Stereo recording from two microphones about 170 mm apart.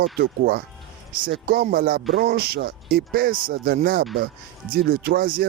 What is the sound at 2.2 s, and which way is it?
Speech, 70° right (ahead or behind).